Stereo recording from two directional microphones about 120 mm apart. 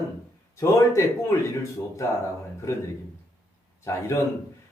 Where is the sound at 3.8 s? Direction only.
25° left (ahead or behind).